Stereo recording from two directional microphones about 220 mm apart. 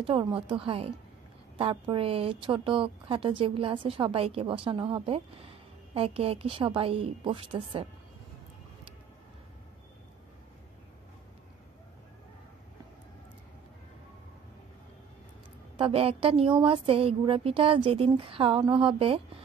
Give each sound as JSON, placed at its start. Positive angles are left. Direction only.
{"t": 0.0, "sound": "speech", "side_deg": -25}
{"t": 15.8, "sound": "speech", "side_deg": -25}